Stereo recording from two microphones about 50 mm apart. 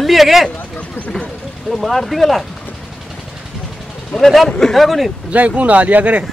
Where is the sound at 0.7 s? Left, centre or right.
Left.